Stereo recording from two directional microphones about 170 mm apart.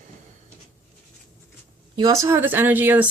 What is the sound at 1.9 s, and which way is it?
Speech, 20° right (ahead or behind).